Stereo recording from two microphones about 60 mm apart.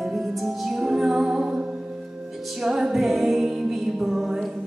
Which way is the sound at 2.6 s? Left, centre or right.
Centre.